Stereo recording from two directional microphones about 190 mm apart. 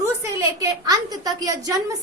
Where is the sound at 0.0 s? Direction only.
15° right (ahead or behind).